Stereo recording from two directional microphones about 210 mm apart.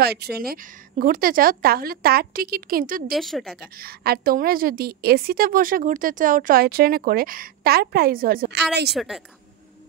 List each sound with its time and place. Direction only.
0.0 s a woman's voice: 50° right (ahead or behind)
3.1 s speech: centre (ahead or behind)
3.6 s a woman's voice: 45° right (ahead or behind)
8.9 s speech: centre (ahead or behind)